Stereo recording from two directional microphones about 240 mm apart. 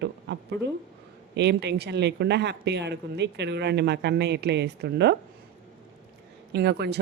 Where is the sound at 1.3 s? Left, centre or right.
Right.